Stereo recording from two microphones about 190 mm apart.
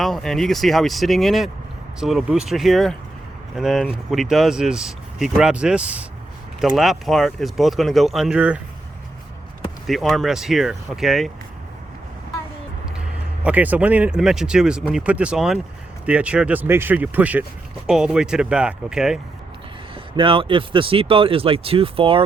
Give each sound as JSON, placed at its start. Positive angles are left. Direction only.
{"t": 0.0, "sound": "speech", "side_deg": 0}
{"t": 9.8, "sound": "speech", "side_deg": 0}
{"t": 13.4, "sound": "speech", "side_deg": -10}
{"t": 20.1, "sound": "speech", "side_deg": -25}